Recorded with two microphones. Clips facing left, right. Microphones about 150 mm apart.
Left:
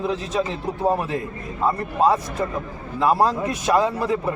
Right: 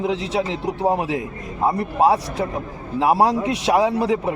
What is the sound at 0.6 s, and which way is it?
A man's voice, 15° right (ahead or behind).